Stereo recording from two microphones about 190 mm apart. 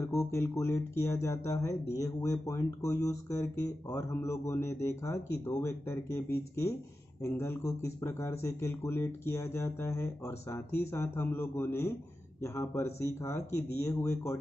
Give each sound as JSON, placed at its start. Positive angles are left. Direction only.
{"t": 0.0, "sound": "speech", "side_deg": 15}
{"t": 7.2, "sound": "speech", "side_deg": 15}